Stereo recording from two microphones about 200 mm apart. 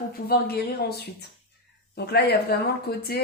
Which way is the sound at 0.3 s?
50° left (ahead or behind).